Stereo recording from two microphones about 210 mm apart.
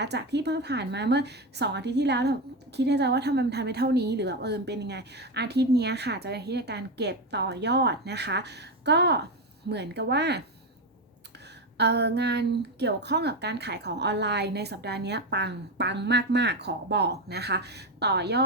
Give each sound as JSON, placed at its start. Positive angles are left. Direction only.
{"t": 0.0, "sound": "a woman's voice", "side_deg": -55}
{"t": 11.8, "sound": "a woman's voice", "side_deg": -55}